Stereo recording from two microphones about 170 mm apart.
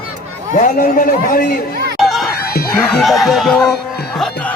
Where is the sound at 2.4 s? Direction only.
65° left (ahead or behind).